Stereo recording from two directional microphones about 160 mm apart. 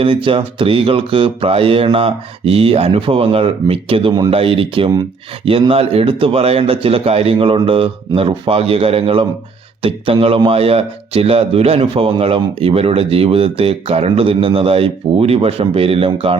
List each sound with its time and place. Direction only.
0.0 s speech: 35° right (ahead or behind)